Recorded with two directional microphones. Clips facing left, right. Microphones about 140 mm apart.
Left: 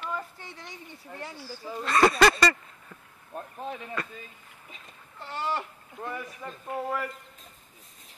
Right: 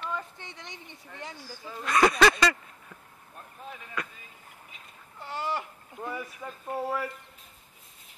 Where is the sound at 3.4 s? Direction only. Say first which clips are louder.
Left 8 dB; 55° left (ahead or behind).